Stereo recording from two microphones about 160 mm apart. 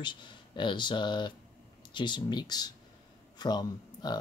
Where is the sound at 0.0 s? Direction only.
30° left (ahead or behind).